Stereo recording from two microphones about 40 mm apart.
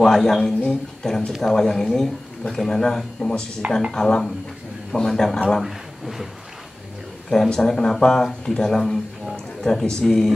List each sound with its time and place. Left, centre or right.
0.0 s speech: centre
5.6 s speech: centre
7.2 s speech: centre